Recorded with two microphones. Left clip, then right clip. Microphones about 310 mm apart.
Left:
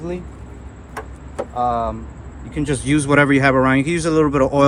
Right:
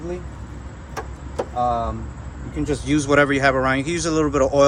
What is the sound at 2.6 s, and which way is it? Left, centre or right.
A man's voice, left.